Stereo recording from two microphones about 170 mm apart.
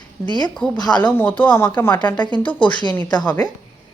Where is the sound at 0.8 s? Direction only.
25° left (ahead or behind).